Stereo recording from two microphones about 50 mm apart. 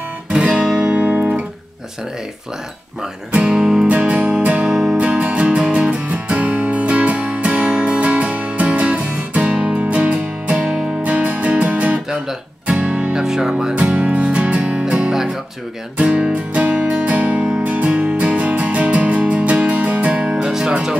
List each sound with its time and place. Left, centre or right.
0.3 s guitar: right
3.3 s speech: right
3.5 s speech: centre
3.9 s music: right
10.6 s music: centre
11.0 s music: right
12.1 s guitar: centre
12.7 s music: right
13.2 s speech: centre
13.7 s music: centre